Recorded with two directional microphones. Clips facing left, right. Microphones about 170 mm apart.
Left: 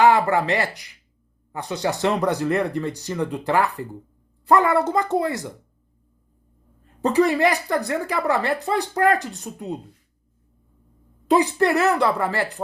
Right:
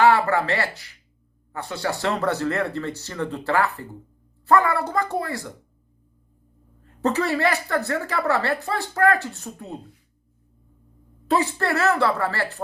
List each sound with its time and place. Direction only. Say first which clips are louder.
0.0 s speech: left 1 dB; 15° left (ahead or behind)
7.0 s speech: left 4 dB; 15° left (ahead or behind)
11.3 s speech: left 4 dB; 15° left (ahead or behind)